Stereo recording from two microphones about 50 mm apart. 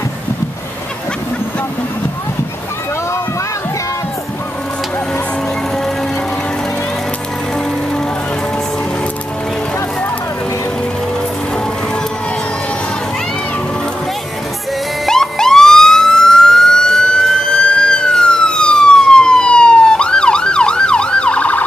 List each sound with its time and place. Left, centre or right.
15.0 s emergency vehicle: centre; by 21.6 s left